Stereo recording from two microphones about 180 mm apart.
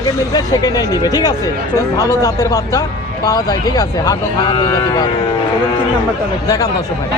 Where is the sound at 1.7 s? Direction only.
15° left (ahead or behind).